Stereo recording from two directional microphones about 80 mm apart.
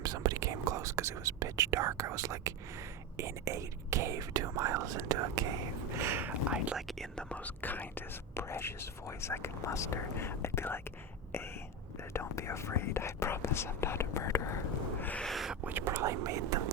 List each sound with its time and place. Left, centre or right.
0.0 s whispering: right
3.2 s speech: right
6.0 s speech: right
6.7 s speech: centre
7.2 s speech: centre
12.1 s speech: left
15.2 s a sound: centre
15.6 s speech: right